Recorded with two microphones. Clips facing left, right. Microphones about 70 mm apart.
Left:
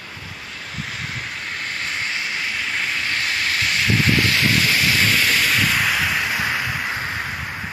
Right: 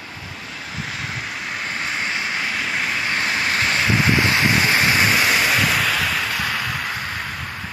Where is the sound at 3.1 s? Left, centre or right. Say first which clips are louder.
Right 3 dB; right; by 5.8 s centre.